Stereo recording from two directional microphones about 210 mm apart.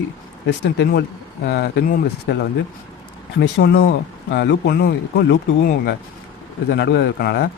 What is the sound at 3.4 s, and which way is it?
A man's voice, 50° left (ahead or behind).